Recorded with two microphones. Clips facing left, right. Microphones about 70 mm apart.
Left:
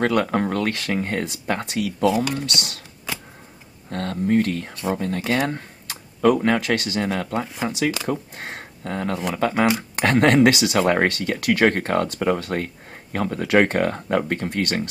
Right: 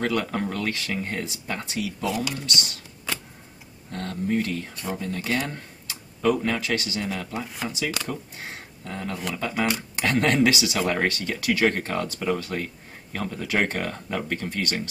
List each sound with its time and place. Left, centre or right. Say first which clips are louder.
0.0 s speech: left 6 dB; left
3.9 s speech: left 6 dB; left